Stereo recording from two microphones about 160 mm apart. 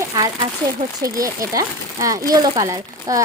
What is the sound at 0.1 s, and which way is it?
A child's voice, 20° right (ahead or behind).